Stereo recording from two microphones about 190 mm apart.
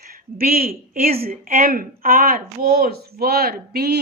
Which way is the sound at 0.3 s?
50° right (ahead or behind).